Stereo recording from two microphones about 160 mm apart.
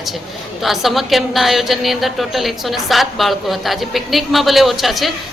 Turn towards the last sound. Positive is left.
turn(degrees=0)  # may be behind; listen again after turning